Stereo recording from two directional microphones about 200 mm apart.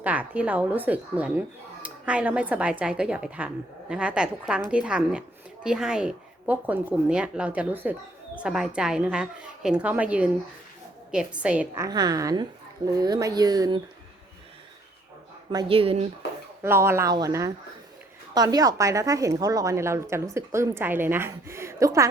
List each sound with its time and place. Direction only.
0.0 s a woman's voice: 5° right (ahead or behind)
15.5 s speech: 25° right (ahead or behind)
16.6 s speech: 10° right (ahead or behind)